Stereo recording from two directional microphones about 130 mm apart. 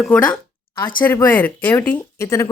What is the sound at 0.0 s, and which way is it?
Speech, 10° left (ahead or behind).